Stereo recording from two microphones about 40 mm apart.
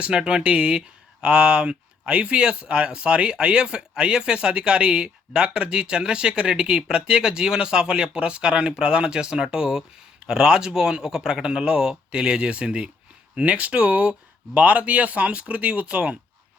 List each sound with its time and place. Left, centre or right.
0.0 s speech: right